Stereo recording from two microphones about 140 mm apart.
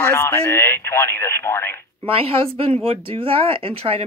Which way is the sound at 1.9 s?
45° right (ahead or behind).